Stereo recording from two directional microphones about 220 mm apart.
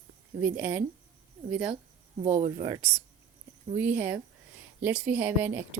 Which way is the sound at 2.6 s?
15° right (ahead or behind).